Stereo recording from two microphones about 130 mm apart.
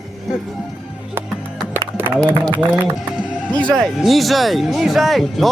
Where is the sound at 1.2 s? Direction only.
20° right (ahead or behind).